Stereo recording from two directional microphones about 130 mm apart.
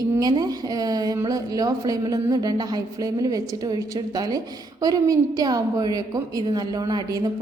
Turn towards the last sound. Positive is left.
turn(degrees=-30)  # may be behind; listen again after turning